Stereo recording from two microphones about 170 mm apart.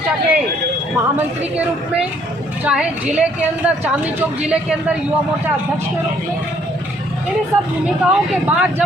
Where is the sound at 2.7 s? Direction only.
5° right (ahead or behind).